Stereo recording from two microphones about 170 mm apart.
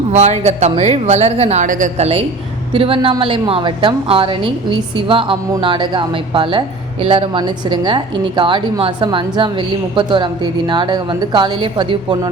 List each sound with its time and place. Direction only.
0.1 s a woman's voice: 40° right (ahead or behind)